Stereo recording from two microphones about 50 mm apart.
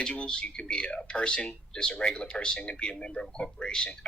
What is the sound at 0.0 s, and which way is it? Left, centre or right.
A man's voice, centre.